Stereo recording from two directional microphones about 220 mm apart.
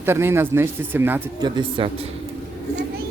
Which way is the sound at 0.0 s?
10° right (ahead or behind).